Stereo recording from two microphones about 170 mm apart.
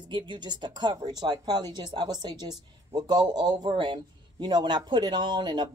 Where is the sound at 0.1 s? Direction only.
25° right (ahead or behind).